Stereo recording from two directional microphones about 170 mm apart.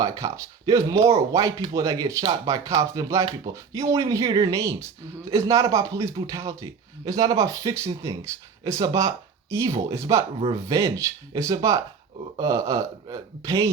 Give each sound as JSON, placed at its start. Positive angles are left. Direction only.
{"t": 0.0, "sound": "speech", "side_deg": -20}